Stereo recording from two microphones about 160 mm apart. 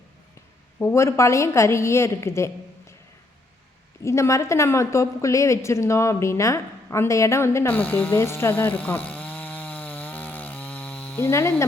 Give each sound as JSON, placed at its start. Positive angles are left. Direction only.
{"t": 0.8, "sound": "a woman's voice", "side_deg": 15}
{"t": 4.0, "sound": "a woman's voice", "side_deg": 20}